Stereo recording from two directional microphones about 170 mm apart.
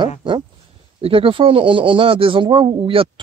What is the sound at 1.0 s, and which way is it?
A man's voice, 30° right (ahead or behind).